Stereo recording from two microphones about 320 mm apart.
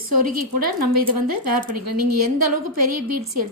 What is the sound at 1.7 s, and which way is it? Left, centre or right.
Speech, right.